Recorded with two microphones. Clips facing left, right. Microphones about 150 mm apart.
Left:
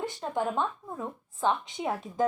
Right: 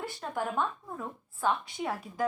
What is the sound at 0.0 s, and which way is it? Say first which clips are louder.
A woman's voice: left 4 dB; 20° left (ahead or behind).